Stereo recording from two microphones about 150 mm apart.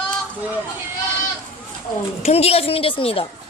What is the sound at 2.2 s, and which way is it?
A woman's voice, 40° left (ahead or behind).